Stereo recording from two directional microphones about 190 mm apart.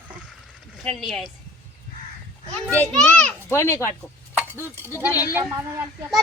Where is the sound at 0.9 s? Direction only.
Centre (ahead or behind).